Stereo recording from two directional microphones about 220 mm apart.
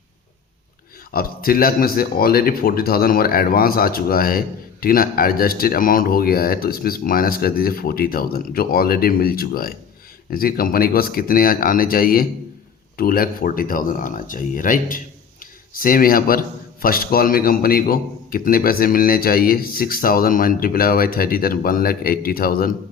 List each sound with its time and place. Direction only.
1.1 s a man's voice: 40° left (ahead or behind)